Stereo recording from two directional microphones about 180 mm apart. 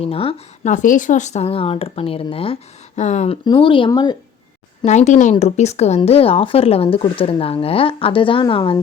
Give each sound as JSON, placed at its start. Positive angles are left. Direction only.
{"t": 0.0, "sound": "speech", "side_deg": 30}
{"t": 3.4, "sound": "speech", "side_deg": 25}
{"t": 4.9, "sound": "speech", "side_deg": 40}